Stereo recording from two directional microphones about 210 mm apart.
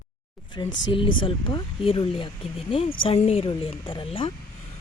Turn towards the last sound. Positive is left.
turn(degrees=25)  # may be behind; listen again after turning